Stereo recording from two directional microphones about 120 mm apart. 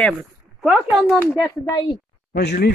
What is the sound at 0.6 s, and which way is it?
Speech, centre (ahead or behind).